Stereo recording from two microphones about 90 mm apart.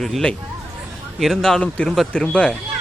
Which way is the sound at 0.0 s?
5° left (ahead or behind).